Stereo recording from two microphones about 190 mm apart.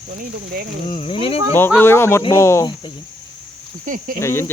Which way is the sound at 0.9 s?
30° left (ahead or behind).